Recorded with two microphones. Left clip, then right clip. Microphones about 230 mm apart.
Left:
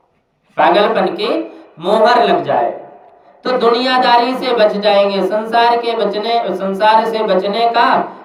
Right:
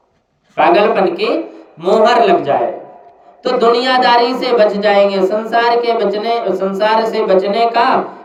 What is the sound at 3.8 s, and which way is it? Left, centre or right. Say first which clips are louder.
Speech: right 1 dB; left.